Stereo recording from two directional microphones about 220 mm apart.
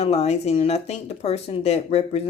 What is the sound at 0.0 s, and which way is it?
Speech, 30° left (ahead or behind).